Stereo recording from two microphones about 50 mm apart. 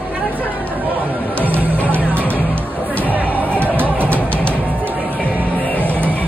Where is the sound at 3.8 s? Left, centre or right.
Right.